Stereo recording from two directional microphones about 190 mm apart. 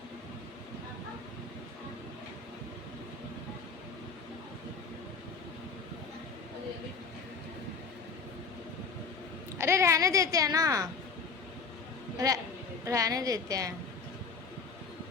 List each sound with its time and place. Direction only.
9.6 s a child's voice: 15° right (ahead or behind)
12.1 s a woman's voice: 20° right (ahead or behind)